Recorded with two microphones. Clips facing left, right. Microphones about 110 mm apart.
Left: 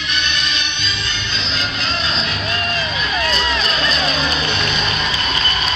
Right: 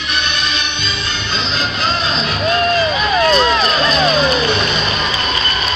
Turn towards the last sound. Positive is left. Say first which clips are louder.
# right 5 dB
turn(degrees=-40)  # may be behind; listen again after turning